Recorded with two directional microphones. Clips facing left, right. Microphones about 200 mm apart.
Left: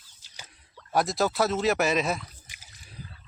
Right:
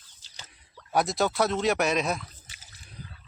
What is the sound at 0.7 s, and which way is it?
Speech, centre (ahead or behind).